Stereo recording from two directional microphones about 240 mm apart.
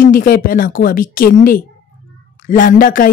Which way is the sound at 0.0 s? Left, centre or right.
Left.